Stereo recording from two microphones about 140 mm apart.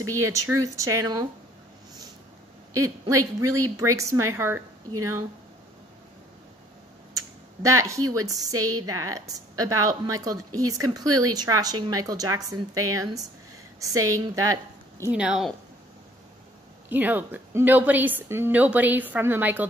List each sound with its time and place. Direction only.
0.1 s speech: 20° right (ahead or behind)
2.7 s speech: 25° right (ahead or behind)
7.2 s speech: 20° right (ahead or behind)
15.0 s a woman's voice: 5° right (ahead or behind)
16.9 s a woman's voice: 10° right (ahead or behind)